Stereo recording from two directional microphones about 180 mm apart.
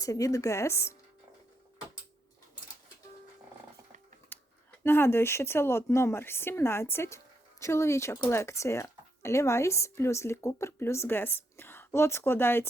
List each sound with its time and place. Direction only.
0.0 s speech: 20° left (ahead or behind)
4.3 s a sound: 10° left (ahead or behind)
4.8 s speech: 10° left (ahead or behind)